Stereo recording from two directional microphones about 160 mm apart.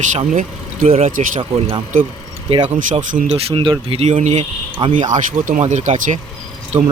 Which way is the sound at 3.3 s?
35° right (ahead or behind).